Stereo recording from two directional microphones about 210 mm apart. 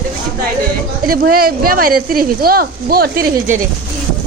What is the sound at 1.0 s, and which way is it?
Speech, 45° right (ahead or behind).